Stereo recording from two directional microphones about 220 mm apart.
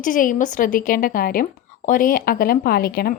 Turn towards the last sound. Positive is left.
turn(degrees=45)  # may be behind; listen again after turning